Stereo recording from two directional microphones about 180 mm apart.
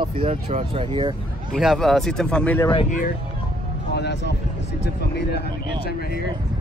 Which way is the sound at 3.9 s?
70° left (ahead or behind).